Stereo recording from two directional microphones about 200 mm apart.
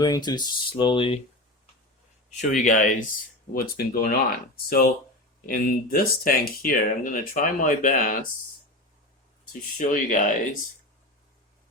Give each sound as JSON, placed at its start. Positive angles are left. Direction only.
{"t": 0.0, "sound": "speech", "side_deg": 20}
{"t": 2.3, "sound": "speech", "side_deg": 40}
{"t": 9.5, "sound": "speech", "side_deg": 45}